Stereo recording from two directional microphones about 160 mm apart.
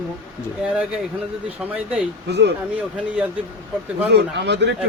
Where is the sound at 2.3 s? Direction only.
90° right.